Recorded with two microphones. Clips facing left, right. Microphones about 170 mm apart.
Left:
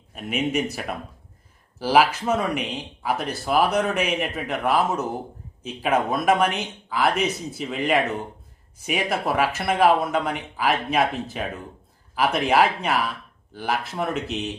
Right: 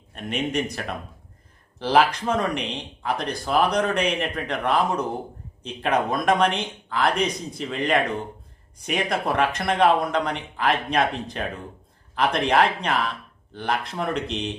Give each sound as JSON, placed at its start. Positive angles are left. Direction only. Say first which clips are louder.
{"t": 0.1, "sound": "speech", "louder": "left 2 dB", "side_deg": 5}